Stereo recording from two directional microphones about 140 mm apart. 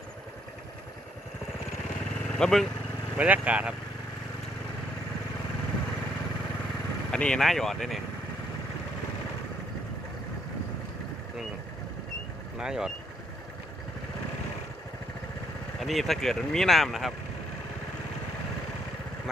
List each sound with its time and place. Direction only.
2.4 s speech: centre (ahead or behind)
3.2 s speech: 10° right (ahead or behind)
7.1 s speech: 5° left (ahead or behind)
12.5 s speech: 5° right (ahead or behind)
15.8 s speech: centre (ahead or behind)